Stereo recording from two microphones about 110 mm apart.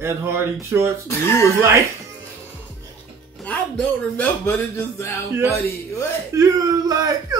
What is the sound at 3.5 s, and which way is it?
Speech, 15° left (ahead or behind).